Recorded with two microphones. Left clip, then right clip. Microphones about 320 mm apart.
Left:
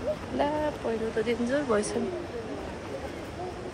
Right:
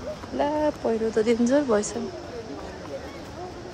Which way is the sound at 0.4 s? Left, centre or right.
Centre.